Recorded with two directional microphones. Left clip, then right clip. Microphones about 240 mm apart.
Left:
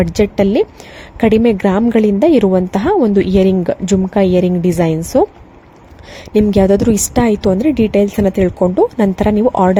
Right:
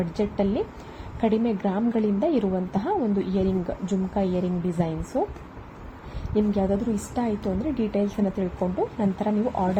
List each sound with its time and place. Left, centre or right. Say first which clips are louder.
0.0 s a woman's voice: left 13 dB; left
6.3 s a woman's voice: left 13 dB; left